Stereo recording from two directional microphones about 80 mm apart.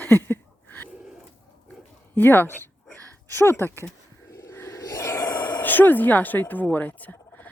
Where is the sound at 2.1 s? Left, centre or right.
Left.